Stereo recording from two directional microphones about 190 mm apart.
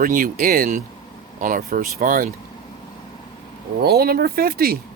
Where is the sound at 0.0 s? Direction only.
45° right (ahead or behind).